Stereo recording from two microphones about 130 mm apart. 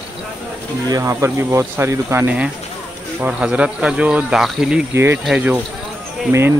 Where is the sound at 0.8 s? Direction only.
25° right (ahead or behind); by 4.8 s 5° right (ahead or behind).